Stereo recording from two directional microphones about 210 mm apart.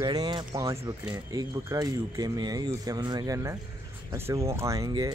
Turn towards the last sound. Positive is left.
turn(degrees=-20)  # may be behind; listen again after turning